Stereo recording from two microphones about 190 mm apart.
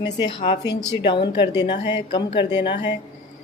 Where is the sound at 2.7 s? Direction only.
65° left (ahead or behind).